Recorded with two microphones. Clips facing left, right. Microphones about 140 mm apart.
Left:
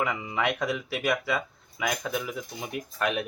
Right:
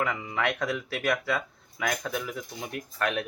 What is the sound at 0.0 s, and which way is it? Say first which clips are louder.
Speech: left 1 dB; 15° left (ahead or behind).